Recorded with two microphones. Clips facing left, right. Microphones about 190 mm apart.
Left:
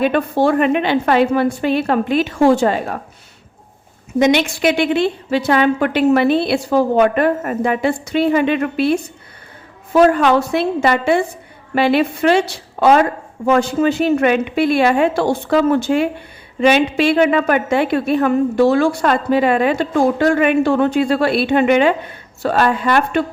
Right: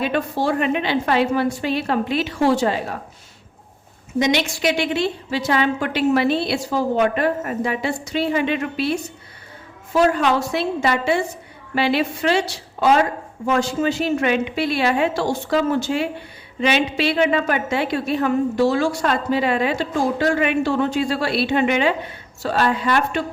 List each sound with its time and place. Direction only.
0.0 s a woman's voice: 55° left (ahead or behind)
4.2 s a woman's voice: 55° left (ahead or behind)